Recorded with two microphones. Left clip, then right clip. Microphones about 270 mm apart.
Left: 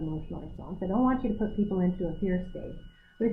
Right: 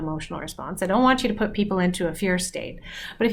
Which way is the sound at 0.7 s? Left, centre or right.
Centre.